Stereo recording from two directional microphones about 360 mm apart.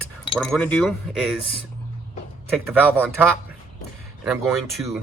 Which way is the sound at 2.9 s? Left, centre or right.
Centre.